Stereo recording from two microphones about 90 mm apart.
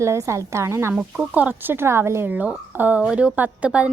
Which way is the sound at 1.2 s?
20° right (ahead or behind).